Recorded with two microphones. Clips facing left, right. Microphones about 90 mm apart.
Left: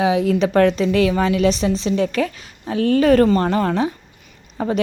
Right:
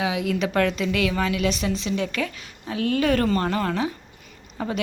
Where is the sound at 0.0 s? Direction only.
35° left (ahead or behind).